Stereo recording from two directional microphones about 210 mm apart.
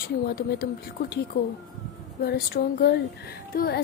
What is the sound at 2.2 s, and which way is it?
Speech, 50° left (ahead or behind).